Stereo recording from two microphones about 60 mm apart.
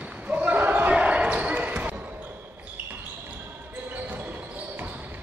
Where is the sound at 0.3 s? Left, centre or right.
Right.